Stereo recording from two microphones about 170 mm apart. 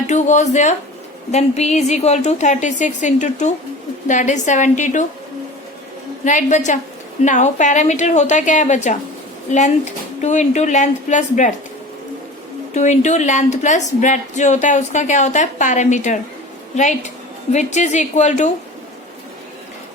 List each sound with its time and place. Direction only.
0.1 s speech: 45° left (ahead or behind)
6.2 s speech: 45° left (ahead or behind)
12.7 s a woman's voice: 45° left (ahead or behind)